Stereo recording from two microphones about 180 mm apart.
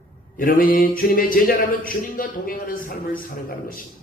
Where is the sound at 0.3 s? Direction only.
50° left (ahead or behind).